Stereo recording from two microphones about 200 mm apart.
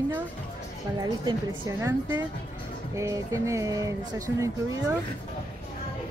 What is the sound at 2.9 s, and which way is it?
Speech, 15° right (ahead or behind).